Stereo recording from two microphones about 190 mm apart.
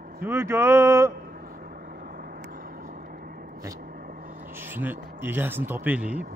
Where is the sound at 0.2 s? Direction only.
15° right (ahead or behind).